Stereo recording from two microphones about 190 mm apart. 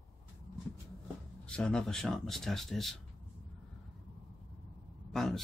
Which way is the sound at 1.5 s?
5° left (ahead or behind).